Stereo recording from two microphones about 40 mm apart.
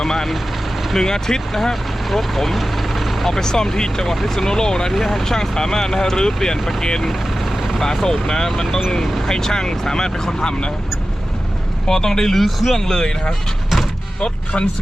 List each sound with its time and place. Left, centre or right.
0.0 s speech: centre
2.0 s speech: centre
8.0 s speech: centre
11.9 s speech: centre